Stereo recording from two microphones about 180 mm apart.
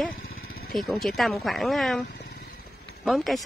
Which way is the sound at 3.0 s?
Centre (ahead or behind).